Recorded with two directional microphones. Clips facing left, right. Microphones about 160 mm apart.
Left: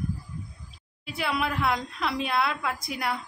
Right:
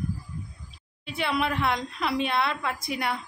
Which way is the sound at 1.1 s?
Centre (ahead or behind).